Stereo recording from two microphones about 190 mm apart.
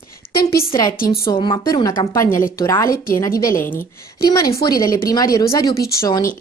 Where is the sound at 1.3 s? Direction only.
25° left (ahead or behind).